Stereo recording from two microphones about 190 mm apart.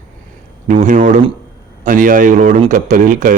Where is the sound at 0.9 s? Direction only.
45° right (ahead or behind).